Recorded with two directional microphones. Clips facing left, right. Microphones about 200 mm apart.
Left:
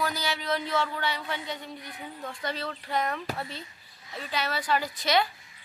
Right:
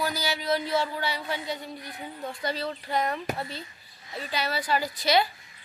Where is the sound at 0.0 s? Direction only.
40° right (ahead or behind).